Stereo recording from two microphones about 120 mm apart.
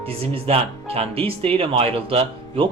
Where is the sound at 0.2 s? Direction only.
55° right (ahead or behind).